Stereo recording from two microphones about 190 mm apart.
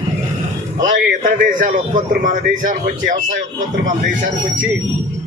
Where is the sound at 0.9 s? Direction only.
45° right (ahead or behind).